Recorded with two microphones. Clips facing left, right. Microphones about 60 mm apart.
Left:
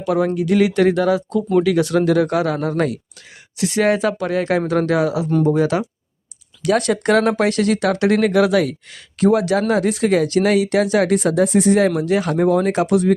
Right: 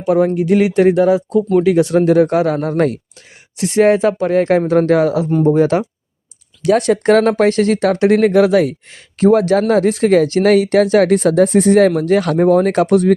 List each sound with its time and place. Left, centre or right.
0.0 s speech: right
5.4 s speech: right